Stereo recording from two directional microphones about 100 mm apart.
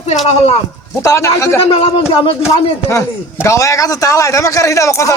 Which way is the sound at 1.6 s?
75° left (ahead or behind).